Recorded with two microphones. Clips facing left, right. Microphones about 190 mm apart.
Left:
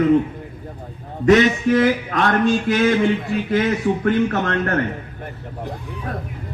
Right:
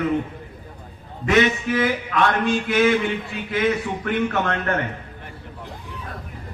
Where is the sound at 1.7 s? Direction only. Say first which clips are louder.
Left 5 dB; 45° left (ahead or behind).